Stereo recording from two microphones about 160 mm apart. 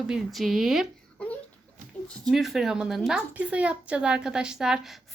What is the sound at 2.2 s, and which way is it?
A woman's voice, centre (ahead or behind).